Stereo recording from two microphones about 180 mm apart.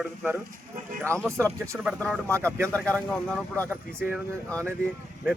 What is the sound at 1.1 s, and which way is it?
Speech, 15° right (ahead or behind).